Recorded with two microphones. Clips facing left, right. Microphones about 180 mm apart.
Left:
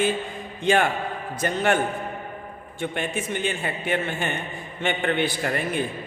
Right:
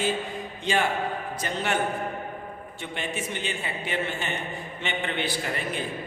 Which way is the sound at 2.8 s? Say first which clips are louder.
Left 5 dB; 50° left (ahead or behind).